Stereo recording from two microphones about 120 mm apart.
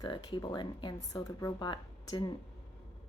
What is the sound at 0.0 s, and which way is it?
Speech, 35° left (ahead or behind).